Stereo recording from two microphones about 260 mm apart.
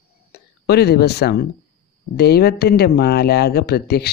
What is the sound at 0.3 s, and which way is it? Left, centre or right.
Speech, left.